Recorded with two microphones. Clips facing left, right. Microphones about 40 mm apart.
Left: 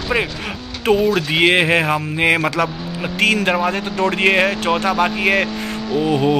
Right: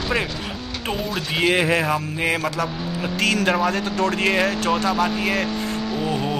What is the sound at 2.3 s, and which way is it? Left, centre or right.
Speech, left.